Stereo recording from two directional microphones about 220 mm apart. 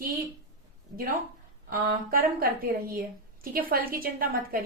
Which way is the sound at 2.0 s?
40° right (ahead or behind).